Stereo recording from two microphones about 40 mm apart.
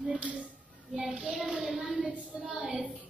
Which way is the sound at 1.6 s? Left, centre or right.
Centre.